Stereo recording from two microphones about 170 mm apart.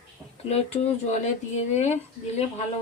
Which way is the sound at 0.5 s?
35° left (ahead or behind).